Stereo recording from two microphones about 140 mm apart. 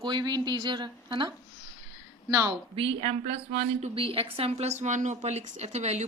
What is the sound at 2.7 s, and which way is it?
A woman's voice, 45° right (ahead or behind).